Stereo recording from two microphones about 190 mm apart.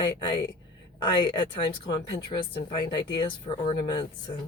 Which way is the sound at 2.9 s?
25° left (ahead or behind).